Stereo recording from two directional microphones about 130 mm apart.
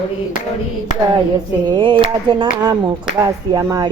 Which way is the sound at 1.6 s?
35° right (ahead or behind).